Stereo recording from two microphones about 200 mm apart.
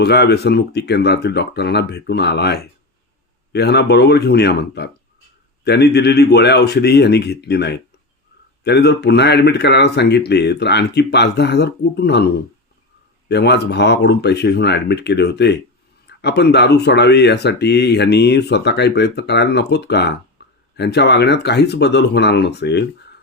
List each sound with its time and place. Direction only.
0.0 s speech: 55° left (ahead or behind)
20.4 s a sound: 55° left (ahead or behind)
20.7 s speech: 55° left (ahead or behind)